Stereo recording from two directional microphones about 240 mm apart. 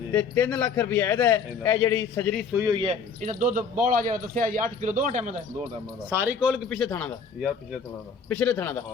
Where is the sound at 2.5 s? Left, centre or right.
Centre.